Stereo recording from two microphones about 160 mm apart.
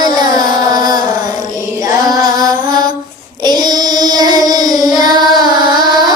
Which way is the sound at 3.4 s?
25° right (ahead or behind).